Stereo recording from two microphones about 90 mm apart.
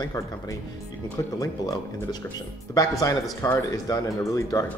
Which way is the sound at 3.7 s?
35° left (ahead or behind).